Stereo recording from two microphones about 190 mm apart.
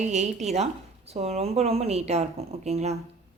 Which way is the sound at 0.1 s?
40° right (ahead or behind).